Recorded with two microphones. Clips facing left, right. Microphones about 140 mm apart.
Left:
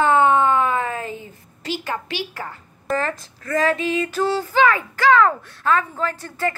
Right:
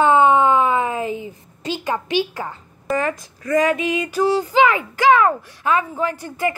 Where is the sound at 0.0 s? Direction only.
15° right (ahead or behind).